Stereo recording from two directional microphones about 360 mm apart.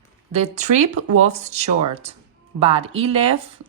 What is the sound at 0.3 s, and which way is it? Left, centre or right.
Speech, centre.